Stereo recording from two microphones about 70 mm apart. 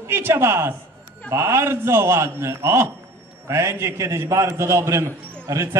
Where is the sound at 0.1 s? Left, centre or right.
Right.